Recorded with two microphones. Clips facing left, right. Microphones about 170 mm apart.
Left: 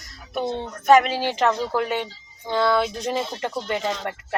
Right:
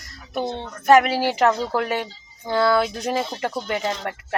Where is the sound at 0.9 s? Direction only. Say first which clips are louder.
Right 1 dB; 5° right (ahead or behind).